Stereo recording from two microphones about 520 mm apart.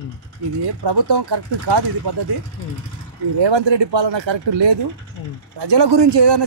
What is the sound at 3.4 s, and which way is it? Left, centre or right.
Speech, right.